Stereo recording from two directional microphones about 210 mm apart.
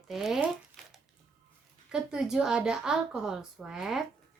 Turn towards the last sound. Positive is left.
turn(degrees=0)  # may be behind; listen again after turning